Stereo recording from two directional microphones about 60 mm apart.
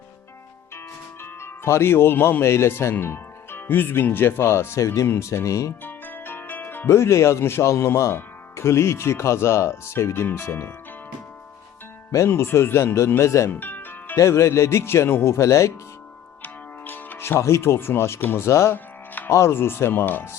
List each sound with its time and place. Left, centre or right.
1.2 s speech: left
2.4 s speech: left
5.8 s music: left
6.9 s speech: left
12.1 s speech: left
13.2 s speech: left
13.5 s music: left
14.2 s speech: left
16.4 s music: left
17.2 s speech: left
18.4 s speech: left
18.7 s music: left
19.3 s speech: left